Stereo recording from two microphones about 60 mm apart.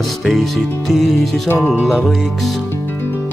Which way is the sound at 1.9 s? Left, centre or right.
Centre.